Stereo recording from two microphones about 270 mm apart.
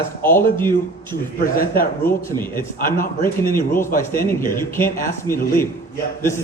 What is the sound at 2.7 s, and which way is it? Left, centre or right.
Speech, left.